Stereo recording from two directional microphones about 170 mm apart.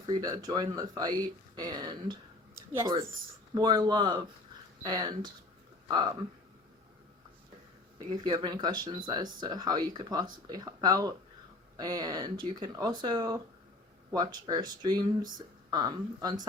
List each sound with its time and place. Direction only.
0.0 s speech: 25° right (ahead or behind)
3.5 s speech: 25° right (ahead or behind)
7.9 s speech: 25° right (ahead or behind)